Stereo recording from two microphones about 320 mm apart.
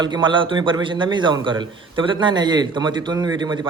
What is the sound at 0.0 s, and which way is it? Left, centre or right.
A man's voice, centre.